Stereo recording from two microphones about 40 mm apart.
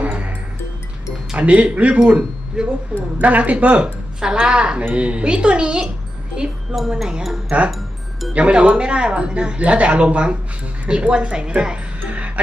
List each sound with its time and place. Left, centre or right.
0.1 s music: right
1.4 s speech: right
3.2 s speech: right
4.2 s speech: right
6.7 s speech: centre
8.3 s speech: right
12.0 s music: right